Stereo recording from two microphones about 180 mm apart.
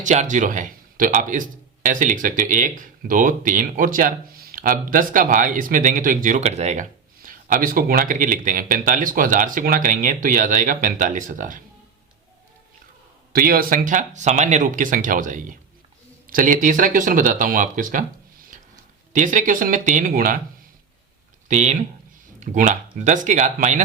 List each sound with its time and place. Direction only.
0.0 s speech: 40° right (ahead or behind)
7.3 s speech: 50° right (ahead or behind)
13.3 s speech: 55° right (ahead or behind)
21.4 s speech: 40° right (ahead or behind)